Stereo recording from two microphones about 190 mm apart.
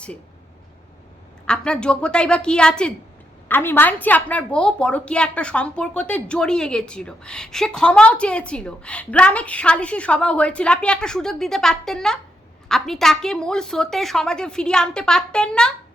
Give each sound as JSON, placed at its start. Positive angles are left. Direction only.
{"t": 1.5, "sound": "a woman's voice", "side_deg": 5}